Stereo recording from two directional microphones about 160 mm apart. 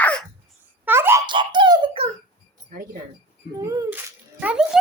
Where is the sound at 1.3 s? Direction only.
30° right (ahead or behind).